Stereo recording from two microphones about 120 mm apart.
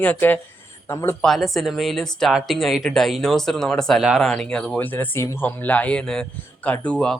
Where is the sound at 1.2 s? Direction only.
Centre (ahead or behind).